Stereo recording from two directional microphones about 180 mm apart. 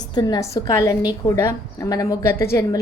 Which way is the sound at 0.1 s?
25° left (ahead or behind).